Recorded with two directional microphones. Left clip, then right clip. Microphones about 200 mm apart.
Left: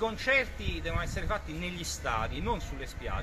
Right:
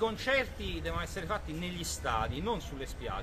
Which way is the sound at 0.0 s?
Centre (ahead or behind).